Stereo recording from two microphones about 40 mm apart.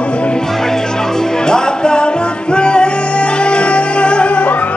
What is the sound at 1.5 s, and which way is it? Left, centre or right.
Music, left.